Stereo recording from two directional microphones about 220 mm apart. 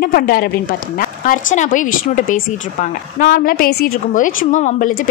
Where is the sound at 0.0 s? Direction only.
40° left (ahead or behind).